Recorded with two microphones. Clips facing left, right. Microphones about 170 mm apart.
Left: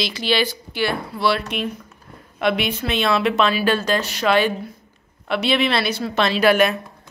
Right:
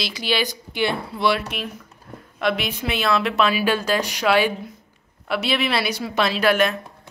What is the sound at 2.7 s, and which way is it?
A woman's voice, 10° right (ahead or behind).